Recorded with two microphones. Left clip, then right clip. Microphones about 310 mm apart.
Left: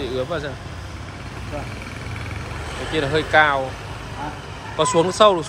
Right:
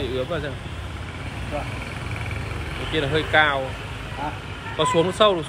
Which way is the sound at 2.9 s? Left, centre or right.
Centre.